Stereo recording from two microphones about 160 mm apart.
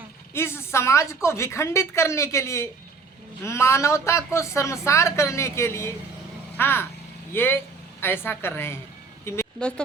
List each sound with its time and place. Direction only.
0.3 s speech: 15° left (ahead or behind)
9.2 s vehicle: 15° left (ahead or behind)
9.6 s speech: 5° left (ahead or behind)